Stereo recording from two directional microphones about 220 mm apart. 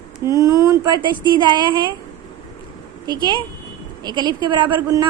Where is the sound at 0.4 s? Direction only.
15° right (ahead or behind).